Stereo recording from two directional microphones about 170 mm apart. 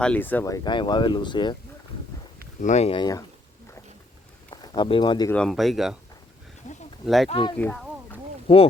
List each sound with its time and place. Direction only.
0.0 s speech: 10° left (ahead or behind); by 1.5 s 25° left (ahead or behind)
2.6 s speech: 45° left (ahead or behind)
2.9 s speech: 25° left (ahead or behind)
4.5 s speech: 25° left (ahead or behind)
5.3 s speech: 5° left (ahead or behind)
7.0 s speech: centre (ahead or behind)
7.3 s speech: 30° left (ahead or behind)
7.5 s speech: 10° left (ahead or behind)
8.5 s speech: 35° left (ahead or behind)